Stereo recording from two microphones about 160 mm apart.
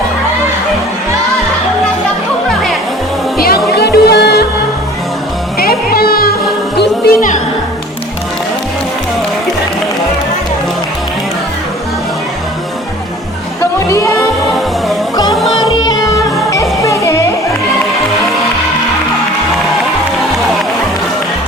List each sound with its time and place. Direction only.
3.3 s music: 70° left (ahead or behind); by 4.4 s 90° left
5.5 s music: 65° left (ahead or behind)
6.7 s music: 80° left
13.6 s music: 20° left (ahead or behind)
15.1 s music: 25° left (ahead or behind)
16.5 s music: 20° left (ahead or behind)